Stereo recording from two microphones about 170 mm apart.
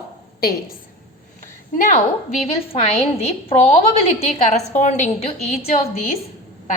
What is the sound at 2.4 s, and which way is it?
A woman's voice, 35° left (ahead or behind).